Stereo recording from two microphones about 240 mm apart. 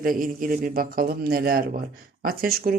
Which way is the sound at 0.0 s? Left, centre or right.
Right.